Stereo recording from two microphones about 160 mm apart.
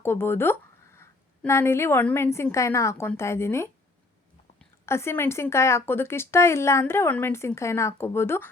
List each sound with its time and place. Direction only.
0.0 s a woman's voice: 15° left (ahead or behind)
4.9 s a woman's voice: 15° left (ahead or behind)